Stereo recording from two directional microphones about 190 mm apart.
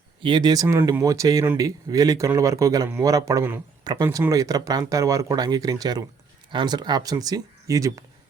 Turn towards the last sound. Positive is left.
turn(degrees=-15)  # may be behind; listen again after turning